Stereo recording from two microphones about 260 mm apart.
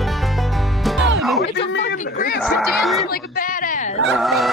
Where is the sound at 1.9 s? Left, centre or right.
Left.